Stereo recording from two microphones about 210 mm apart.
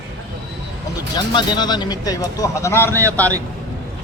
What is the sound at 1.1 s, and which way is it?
Speech, 20° left (ahead or behind).